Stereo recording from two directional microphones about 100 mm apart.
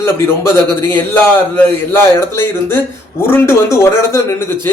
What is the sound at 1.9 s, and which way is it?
A man's voice, 20° left (ahead or behind).